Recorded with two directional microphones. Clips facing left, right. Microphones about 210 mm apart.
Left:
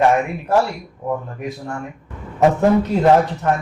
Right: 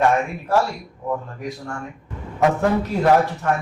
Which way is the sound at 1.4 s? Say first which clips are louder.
Left 3 dB; 20° left (ahead or behind).